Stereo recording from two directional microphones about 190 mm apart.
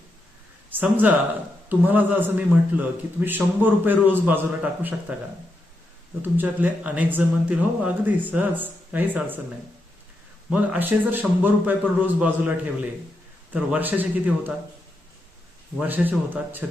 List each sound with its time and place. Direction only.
0.7 s a man's voice: 10° right (ahead or behind)
6.2 s a man's voice: 10° right (ahead or behind)
10.5 s a man's voice: 10° right (ahead or behind)
15.8 s a man's voice: 10° right (ahead or behind)